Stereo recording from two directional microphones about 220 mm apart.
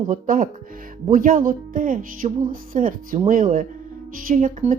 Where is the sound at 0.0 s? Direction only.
40° right (ahead or behind).